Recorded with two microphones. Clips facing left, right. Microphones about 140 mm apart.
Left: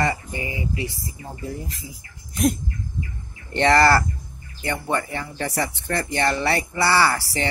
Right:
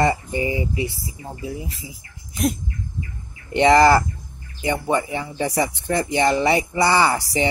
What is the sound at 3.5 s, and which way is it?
Speech, 15° right (ahead or behind).